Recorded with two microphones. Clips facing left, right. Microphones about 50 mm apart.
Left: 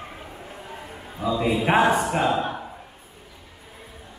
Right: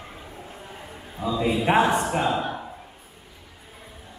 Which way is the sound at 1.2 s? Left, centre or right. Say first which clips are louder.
Left 1 dB; centre.